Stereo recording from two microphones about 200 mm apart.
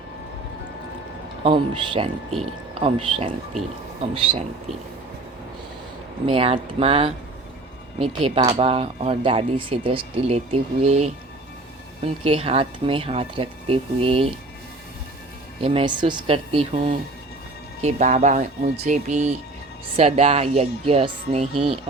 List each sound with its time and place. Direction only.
1.5 s speech: 25° right (ahead or behind)
6.2 s speech: 30° right (ahead or behind)
12.2 s speech: 30° right (ahead or behind)
15.6 s speech: 25° right (ahead or behind)